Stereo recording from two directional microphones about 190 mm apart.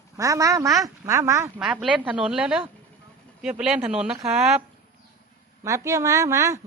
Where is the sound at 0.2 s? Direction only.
15° right (ahead or behind).